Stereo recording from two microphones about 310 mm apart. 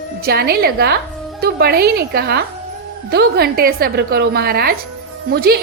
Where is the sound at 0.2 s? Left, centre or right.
Right.